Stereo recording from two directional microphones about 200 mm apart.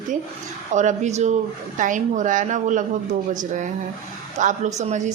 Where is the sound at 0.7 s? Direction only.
35° right (ahead or behind).